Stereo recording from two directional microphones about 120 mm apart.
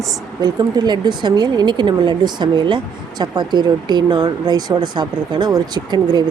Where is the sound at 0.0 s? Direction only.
30° right (ahead or behind).